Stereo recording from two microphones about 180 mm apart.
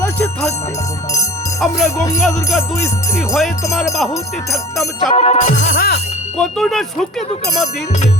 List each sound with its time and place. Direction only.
0.0 s music: 10° left (ahead or behind)
1.6 s music: centre (ahead or behind)
5.1 s music: 35° left (ahead or behind)
5.5 s music: 50° left (ahead or behind)
6.4 s music: centre (ahead or behind)